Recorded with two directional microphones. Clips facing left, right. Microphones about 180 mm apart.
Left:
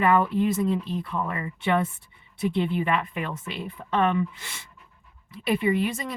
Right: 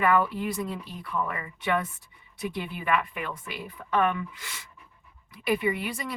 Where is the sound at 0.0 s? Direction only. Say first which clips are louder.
Left 3 dB; 25° left (ahead or behind).